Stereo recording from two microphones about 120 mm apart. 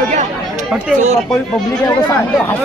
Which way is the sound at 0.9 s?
70° right (ahead or behind).